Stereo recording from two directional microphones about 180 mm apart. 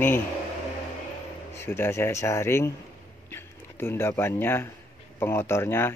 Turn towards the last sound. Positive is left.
turn(degrees=10)  # may be behind; listen again after turning